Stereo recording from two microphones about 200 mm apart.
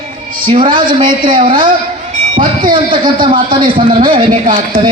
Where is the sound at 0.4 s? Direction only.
25° right (ahead or behind).